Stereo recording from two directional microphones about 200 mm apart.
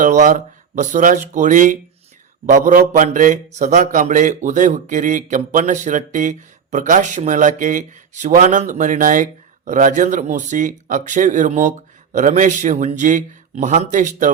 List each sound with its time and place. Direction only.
0.0 s a man's voice: 40° right (ahead or behind)